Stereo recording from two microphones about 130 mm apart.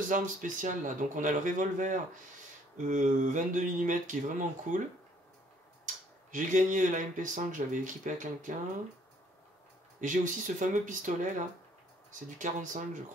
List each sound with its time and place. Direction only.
0.1 s speech: 85° right
2.9 s speech: 75° right (ahead or behind)
6.3 s speech: 80° right
9.9 s speech: 75° right (ahead or behind)